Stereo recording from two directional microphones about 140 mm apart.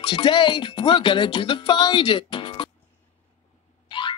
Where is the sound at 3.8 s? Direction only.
35° left (ahead or behind).